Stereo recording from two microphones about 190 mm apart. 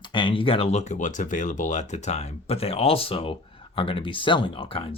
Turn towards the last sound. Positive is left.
turn(degrees=30)  # may be behind; listen again after turning